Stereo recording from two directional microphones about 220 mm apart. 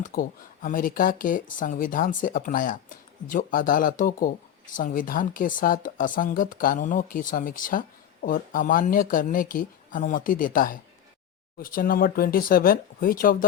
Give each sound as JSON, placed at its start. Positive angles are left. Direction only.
{"t": 0.1, "sound": "speech", "side_deg": 40}